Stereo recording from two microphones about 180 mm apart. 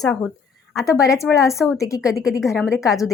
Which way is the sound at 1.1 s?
15° left (ahead or behind).